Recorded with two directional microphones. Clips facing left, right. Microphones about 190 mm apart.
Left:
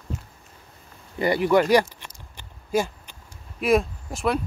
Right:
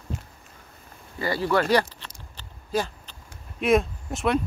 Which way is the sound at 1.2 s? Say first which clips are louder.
Left 4 dB; 20° left (ahead or behind).